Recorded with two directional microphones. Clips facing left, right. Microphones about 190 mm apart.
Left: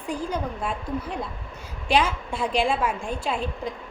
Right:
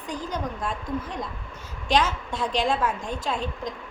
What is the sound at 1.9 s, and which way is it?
A woman's voice, 10° left (ahead or behind).